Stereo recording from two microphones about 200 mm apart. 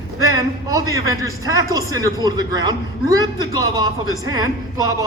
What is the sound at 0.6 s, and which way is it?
A man's voice, 15° right (ahead or behind).